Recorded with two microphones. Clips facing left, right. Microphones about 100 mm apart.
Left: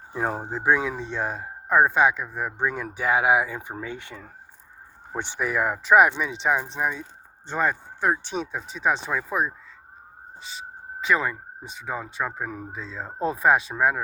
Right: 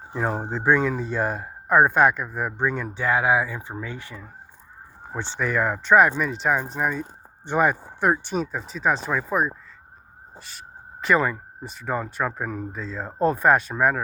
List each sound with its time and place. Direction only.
0.5 s speech: 5° left (ahead or behind)
2.8 s speech: 15° left (ahead or behind); by 7.0 s centre (ahead or behind)
7.4 s speech: 15° right (ahead or behind)
11.0 s speech: centre (ahead or behind)